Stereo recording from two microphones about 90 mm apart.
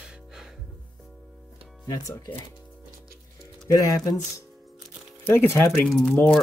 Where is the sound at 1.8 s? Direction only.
40° left (ahead or behind).